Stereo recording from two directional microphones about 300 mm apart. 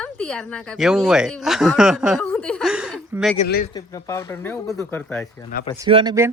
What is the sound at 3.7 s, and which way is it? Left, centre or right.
Speech, centre.